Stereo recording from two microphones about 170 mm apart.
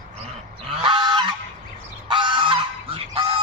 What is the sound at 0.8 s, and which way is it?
Goose, 30° right (ahead or behind).